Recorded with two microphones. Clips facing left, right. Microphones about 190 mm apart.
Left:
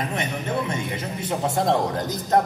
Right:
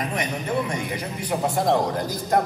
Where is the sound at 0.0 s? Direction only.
25° left (ahead or behind).